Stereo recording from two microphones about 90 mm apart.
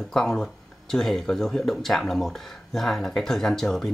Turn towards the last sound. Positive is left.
turn(degrees=5)  # may be behind; listen again after turning